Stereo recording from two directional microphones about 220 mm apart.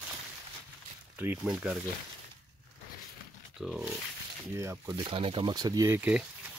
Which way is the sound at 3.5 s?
Centre (ahead or behind).